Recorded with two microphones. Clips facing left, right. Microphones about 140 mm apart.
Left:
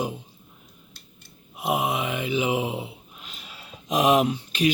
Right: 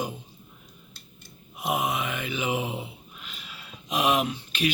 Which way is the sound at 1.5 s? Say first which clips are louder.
Left 2 dB; 25° left (ahead or behind).